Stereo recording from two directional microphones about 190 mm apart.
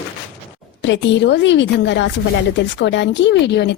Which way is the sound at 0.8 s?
70° left (ahead or behind).